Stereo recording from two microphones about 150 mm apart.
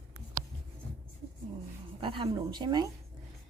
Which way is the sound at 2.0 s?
35° right (ahead or behind).